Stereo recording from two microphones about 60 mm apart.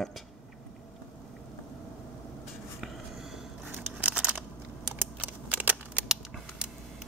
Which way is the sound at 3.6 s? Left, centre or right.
Centre.